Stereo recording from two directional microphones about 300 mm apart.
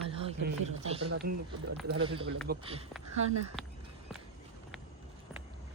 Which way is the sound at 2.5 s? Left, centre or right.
Right.